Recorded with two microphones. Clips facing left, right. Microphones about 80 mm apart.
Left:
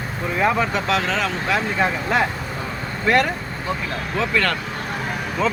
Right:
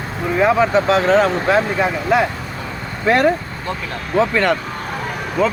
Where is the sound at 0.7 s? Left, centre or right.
Right.